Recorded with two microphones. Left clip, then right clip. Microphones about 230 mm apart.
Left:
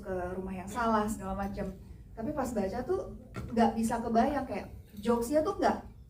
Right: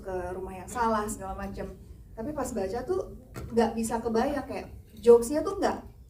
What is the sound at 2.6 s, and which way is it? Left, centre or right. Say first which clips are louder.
Speech: right 2 dB; right.